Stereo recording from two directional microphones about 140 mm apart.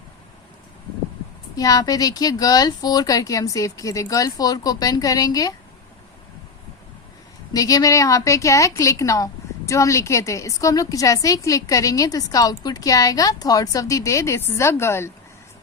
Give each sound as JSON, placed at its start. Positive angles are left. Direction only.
{"t": 1.5, "sound": "a woman's voice", "side_deg": 25}
{"t": 7.5, "sound": "a woman's voice", "side_deg": 25}